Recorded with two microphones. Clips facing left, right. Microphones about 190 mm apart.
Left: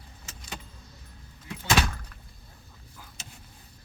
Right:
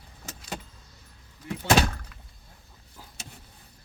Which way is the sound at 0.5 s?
50° right (ahead or behind).